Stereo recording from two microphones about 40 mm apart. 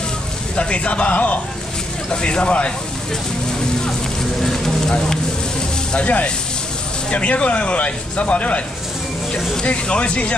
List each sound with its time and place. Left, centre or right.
0.6 s speech: left
2.0 s speech: left
4.4 s a sound: centre
5.9 s speech: left